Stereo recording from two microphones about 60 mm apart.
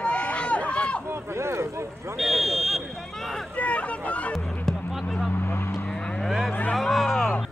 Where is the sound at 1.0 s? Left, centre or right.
Right.